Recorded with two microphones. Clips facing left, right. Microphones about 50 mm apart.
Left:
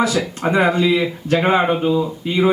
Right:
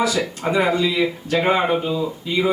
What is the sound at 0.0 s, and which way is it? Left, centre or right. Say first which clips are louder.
Speech: left 2 dB; left.